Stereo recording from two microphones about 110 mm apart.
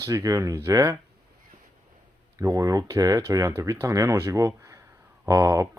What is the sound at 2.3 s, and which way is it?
Speech, 30° right (ahead or behind).